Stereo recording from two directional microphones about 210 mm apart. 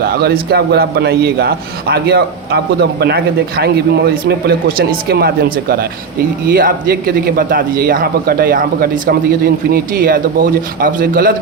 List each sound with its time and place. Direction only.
0.0 s a man's voice: 45° right (ahead or behind)